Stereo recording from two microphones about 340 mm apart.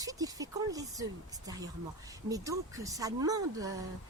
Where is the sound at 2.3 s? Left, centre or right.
Centre.